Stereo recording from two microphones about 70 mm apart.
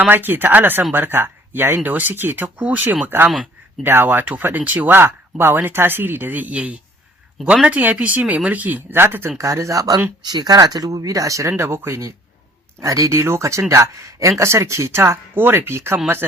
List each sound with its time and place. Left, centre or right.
0.1 s speech: right
9.4 s speech: right
10.2 s speech: right
11.6 s speech: right